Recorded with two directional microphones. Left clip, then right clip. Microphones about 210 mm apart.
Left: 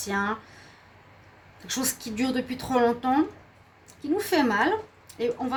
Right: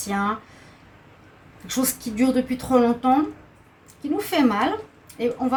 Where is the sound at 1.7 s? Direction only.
40° left (ahead or behind).